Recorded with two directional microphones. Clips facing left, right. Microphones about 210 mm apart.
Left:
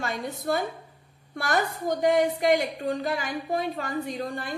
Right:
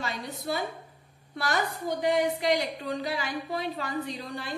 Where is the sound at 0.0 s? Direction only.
50° left (ahead or behind).